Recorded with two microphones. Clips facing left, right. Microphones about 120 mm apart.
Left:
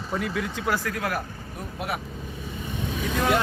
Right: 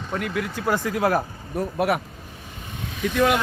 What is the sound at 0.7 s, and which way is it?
Speech, 20° right (ahead or behind).